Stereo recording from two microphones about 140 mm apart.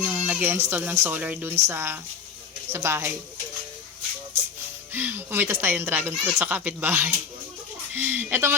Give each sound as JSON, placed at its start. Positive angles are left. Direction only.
{"t": 0.0, "sound": "speech", "side_deg": -10}
{"t": 4.9, "sound": "speech", "side_deg": -15}